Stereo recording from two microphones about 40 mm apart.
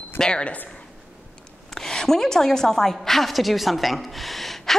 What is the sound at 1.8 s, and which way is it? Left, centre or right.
A woman's voice, centre.